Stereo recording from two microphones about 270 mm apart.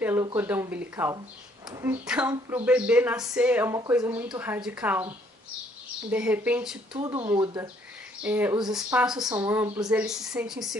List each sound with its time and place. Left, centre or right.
0.0 s a woman's voice: centre
6.9 s a woman's voice: centre